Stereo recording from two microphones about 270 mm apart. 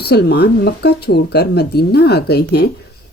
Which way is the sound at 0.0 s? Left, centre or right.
Left.